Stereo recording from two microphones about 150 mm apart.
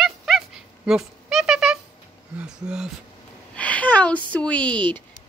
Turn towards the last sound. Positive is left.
turn(degrees=10)  # may be behind; listen again after turning